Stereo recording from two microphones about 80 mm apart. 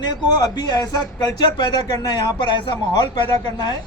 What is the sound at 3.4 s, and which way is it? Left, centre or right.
Speech, left.